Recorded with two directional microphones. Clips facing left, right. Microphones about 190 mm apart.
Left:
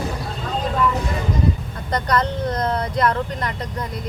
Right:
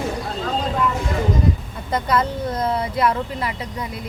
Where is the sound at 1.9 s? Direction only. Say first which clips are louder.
Even; 5° right (ahead or behind).